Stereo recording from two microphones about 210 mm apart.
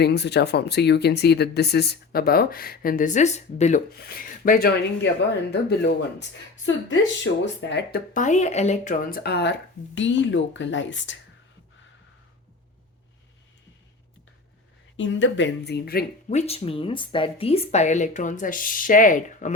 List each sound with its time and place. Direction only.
0.0 s speech: 50° left (ahead or behind)
6.7 s speech: 65° left (ahead or behind)
7.4 s speech: 55° left (ahead or behind)
14.9 s speech: 60° left (ahead or behind); by 16.0 s 45° left (ahead or behind)
16.3 s speech: 30° left (ahead or behind)